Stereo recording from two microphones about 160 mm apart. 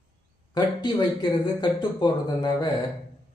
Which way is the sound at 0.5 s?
25° left (ahead or behind).